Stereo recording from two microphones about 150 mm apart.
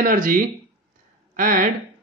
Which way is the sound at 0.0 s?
65° right (ahead or behind).